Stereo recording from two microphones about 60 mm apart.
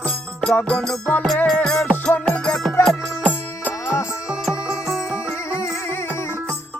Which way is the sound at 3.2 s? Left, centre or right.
Left.